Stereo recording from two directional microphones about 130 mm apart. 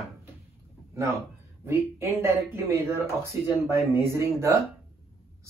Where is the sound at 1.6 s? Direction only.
20° right (ahead or behind).